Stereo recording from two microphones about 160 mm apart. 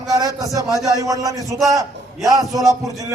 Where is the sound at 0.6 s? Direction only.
20° right (ahead or behind).